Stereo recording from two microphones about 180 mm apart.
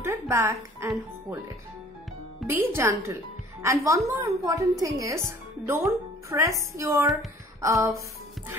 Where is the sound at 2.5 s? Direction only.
15° right (ahead or behind).